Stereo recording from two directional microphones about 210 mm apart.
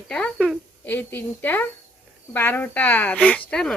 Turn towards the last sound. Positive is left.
turn(degrees=5)  # may be behind; listen again after turning